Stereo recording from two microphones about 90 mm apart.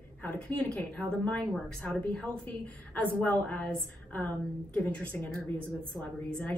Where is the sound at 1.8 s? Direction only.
10° left (ahead or behind).